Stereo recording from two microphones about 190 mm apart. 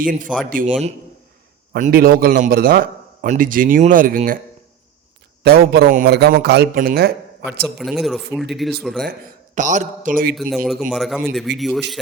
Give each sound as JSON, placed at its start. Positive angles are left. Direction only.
{"t": 0.0, "sound": "a man's voice", "side_deg": -45}
{"t": 1.7, "sound": "a man's voice", "side_deg": -50}
{"t": 5.4, "sound": "a man's voice", "side_deg": -55}
{"t": 7.8, "sound": "speech", "side_deg": 0}
{"t": 9.6, "sound": "a man's voice", "side_deg": -40}
{"t": 10.3, "sound": "speech", "side_deg": 0}